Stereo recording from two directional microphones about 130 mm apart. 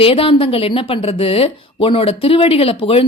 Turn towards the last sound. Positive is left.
turn(degrees=45)  # may be behind; listen again after turning